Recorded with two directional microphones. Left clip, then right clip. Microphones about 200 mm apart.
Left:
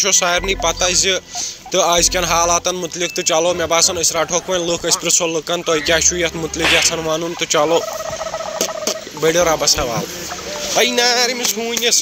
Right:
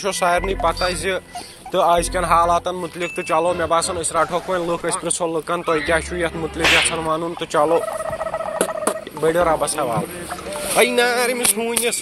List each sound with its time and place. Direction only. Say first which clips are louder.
0.0 s speech: left 3 dB; 15° left (ahead or behind); by 6.1 s 30° left (ahead or behind)
6.6 s speech: left 1 dB; centre (ahead or behind)
7.1 s speech: left 3 dB; 30° left (ahead or behind)
8.5 s turkey: even; 30° left (ahead or behind)
9.5 s speech: left 3 dB; 35° left (ahead or behind)
10.8 s speech: left 1 dB; 15° left (ahead or behind)